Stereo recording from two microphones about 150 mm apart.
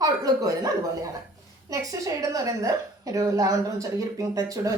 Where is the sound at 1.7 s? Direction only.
20° right (ahead or behind).